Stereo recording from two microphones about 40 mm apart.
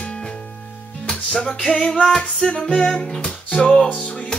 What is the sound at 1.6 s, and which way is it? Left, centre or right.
Music, left.